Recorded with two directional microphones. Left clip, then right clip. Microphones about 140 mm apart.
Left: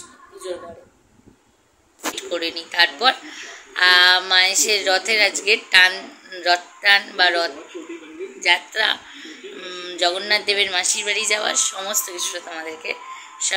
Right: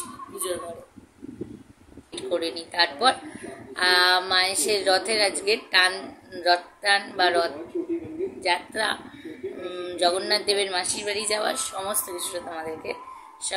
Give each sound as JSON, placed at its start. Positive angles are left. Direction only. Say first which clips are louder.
{"t": 2.1, "sound": "a woman's voice", "louder": "even", "side_deg": -5}